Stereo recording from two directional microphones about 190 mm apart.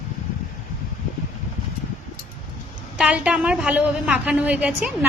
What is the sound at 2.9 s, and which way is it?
A woman's voice, 5° right (ahead or behind).